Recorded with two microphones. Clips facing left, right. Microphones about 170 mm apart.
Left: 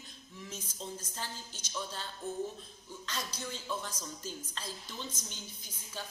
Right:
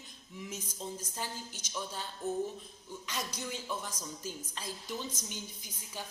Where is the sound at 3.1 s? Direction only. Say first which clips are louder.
Right 1 dB; 15° right (ahead or behind).